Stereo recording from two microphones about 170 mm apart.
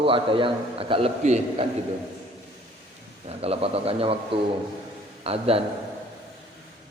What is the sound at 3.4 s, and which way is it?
Speech, 35° right (ahead or behind).